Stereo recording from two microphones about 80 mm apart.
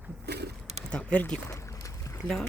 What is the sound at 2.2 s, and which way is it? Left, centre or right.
Speech, centre.